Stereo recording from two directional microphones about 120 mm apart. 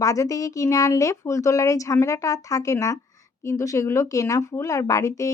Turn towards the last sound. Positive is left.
turn(degrees=25)  # may be behind; listen again after turning